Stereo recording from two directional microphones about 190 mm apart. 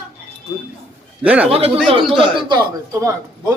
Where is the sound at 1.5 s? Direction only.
30° right (ahead or behind).